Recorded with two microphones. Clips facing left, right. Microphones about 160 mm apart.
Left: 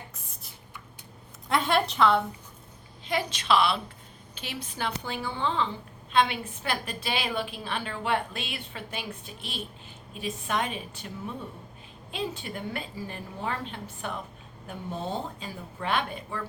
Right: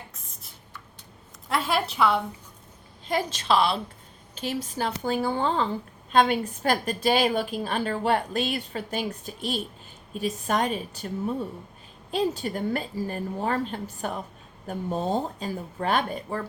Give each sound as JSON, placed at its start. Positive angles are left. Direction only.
{"t": 1.5, "sound": "a woman's voice", "side_deg": -5}
{"t": 3.1, "sound": "a woman's voice", "side_deg": -45}